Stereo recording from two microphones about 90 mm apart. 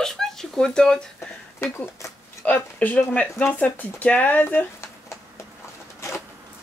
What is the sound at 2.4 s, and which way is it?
Speech, 15° left (ahead or behind).